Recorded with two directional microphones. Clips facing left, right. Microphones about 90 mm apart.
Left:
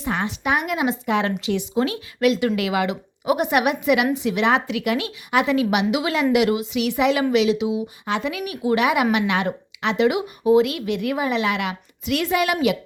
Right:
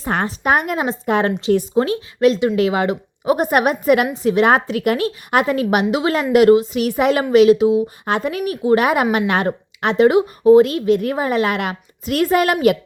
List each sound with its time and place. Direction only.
0.0 s a woman's voice: 45° right (ahead or behind)